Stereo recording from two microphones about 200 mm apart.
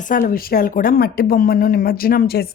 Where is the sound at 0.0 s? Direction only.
45° left (ahead or behind).